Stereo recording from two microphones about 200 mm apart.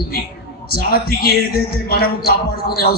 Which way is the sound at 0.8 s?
50° left (ahead or behind).